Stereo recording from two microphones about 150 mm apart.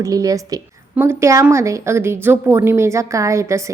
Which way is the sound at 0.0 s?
25° right (ahead or behind).